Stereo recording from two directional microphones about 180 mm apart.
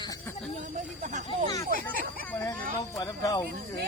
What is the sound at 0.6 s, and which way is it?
Speech, 45° right (ahead or behind).